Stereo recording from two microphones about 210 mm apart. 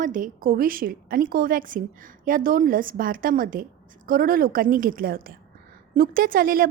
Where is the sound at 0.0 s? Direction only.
40° right (ahead or behind).